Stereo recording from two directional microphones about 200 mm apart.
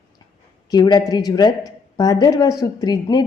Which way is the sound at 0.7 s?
20° left (ahead or behind).